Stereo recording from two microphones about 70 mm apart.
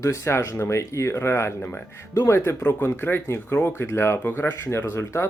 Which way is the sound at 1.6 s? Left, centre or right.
Left.